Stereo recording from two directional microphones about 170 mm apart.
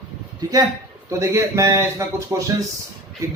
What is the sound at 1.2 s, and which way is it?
A man's voice, 15° right (ahead or behind).